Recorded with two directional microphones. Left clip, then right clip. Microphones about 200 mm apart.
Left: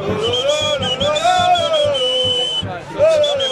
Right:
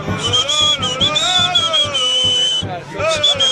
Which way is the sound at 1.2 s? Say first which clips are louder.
Left 1 dB; 35° left (ahead or behind).